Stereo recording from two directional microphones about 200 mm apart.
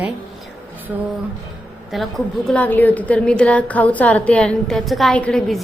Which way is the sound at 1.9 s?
Centre (ahead or behind).